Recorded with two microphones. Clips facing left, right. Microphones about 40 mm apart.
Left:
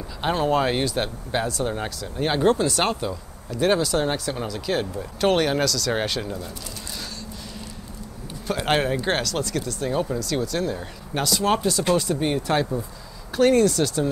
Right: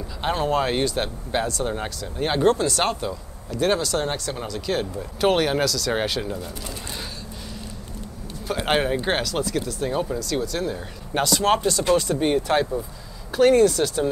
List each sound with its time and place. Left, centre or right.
0.2 s speech: centre
8.5 s speech: centre